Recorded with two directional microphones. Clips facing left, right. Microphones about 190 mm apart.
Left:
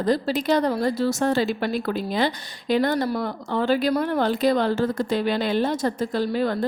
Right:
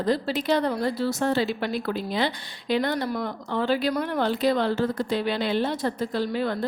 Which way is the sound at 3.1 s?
35° left (ahead or behind).